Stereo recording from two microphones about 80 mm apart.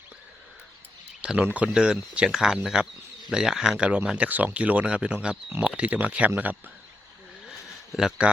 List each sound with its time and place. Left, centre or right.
1.2 s speech: centre
7.9 s speech: centre